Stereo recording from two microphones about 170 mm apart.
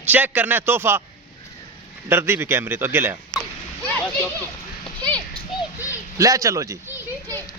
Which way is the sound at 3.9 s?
10° left (ahead or behind).